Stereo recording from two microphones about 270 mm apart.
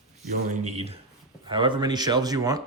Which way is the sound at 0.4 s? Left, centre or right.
Right.